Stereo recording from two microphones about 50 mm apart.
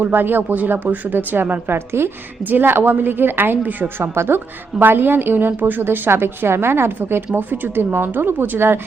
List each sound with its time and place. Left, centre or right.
0.0 s a woman's voice: right
2.4 s a woman's voice: right
4.8 s a woman's voice: right
7.3 s a woman's voice: right